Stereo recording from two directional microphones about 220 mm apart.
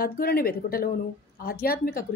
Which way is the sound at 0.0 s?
45° left (ahead or behind).